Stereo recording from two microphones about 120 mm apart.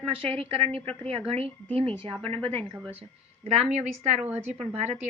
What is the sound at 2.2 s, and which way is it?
A woman's voice, 55° right (ahead or behind).